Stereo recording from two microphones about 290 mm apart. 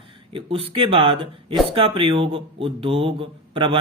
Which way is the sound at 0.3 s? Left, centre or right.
Centre.